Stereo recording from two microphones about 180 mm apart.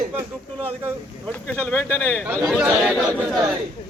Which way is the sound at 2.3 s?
5° right (ahead or behind).